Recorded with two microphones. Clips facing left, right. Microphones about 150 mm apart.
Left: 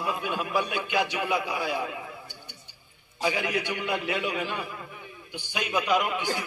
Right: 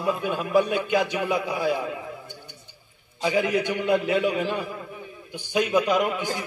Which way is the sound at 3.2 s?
45° right (ahead or behind).